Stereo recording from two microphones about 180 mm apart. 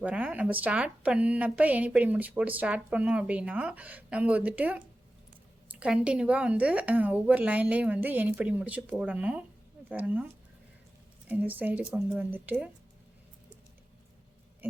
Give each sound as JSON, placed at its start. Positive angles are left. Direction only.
{"t": 0.0, "sound": "speech", "side_deg": -10}
{"t": 11.3, "sound": "speech", "side_deg": -10}
{"t": 14.6, "sound": "owl", "side_deg": -10}